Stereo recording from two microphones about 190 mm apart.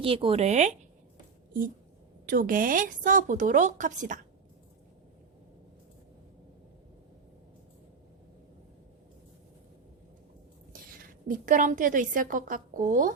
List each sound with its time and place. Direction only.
0.0 s speech: 30° right (ahead or behind)
2.2 s speech: 45° right (ahead or behind)
10.7 s a woman's voice: 50° right (ahead or behind)